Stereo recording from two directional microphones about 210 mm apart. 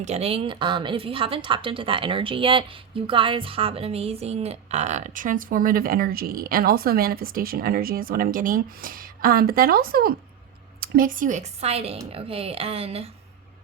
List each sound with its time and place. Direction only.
0.0 s a woman's voice: 30° right (ahead or behind)